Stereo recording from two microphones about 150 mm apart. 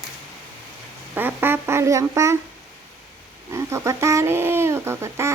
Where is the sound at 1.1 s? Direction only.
15° right (ahead or behind).